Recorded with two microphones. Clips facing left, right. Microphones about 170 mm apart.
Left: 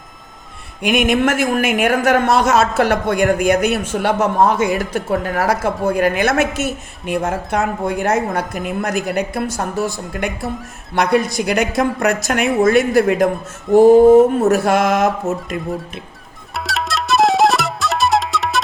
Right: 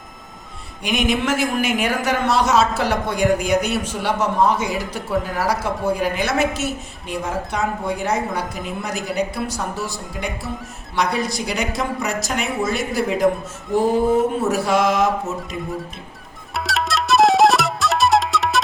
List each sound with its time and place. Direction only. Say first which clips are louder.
0.8 s speech: left 5 dB; 55° left (ahead or behind)
14.4 s speech: left 4 dB; 50° left (ahead or behind)
16.6 s music: even; centre (ahead or behind)